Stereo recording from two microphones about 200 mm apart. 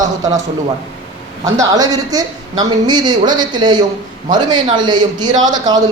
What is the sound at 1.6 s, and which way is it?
A man's voice, 20° right (ahead or behind).